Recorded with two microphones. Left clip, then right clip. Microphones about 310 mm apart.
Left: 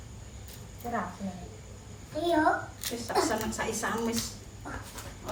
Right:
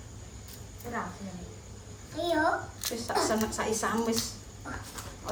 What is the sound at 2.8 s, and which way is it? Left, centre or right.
A woman's voice, centre.